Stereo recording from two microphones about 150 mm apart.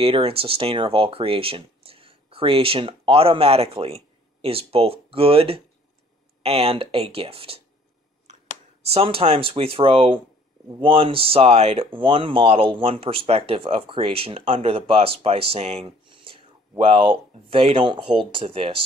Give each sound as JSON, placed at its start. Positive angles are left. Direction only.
{"t": 0.0, "sound": "speech", "side_deg": -40}
{"t": 8.9, "sound": "speech", "side_deg": -40}